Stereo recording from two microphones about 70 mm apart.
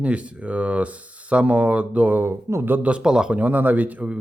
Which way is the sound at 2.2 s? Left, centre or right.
Right.